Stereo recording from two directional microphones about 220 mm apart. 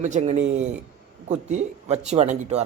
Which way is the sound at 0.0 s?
30° right (ahead or behind).